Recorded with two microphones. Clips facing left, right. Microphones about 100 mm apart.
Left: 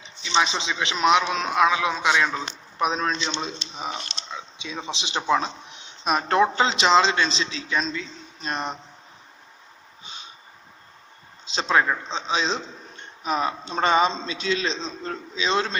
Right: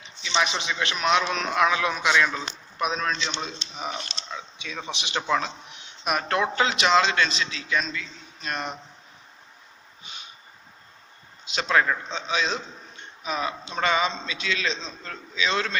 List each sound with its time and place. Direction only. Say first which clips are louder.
0.3 s a man's voice: left 2 dB; 20° left (ahead or behind)
11.4 s a man's voice: left 1 dB; 25° left (ahead or behind)